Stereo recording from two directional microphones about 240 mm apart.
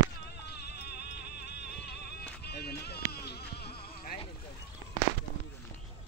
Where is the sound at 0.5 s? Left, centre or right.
Left.